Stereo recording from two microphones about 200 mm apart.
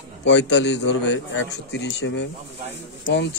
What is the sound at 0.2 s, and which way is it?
A man's voice, 60° left (ahead or behind).